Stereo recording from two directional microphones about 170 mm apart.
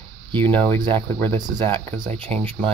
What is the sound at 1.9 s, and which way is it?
Speech, 30° right (ahead or behind).